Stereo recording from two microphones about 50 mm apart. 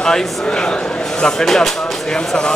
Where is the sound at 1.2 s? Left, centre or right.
Centre.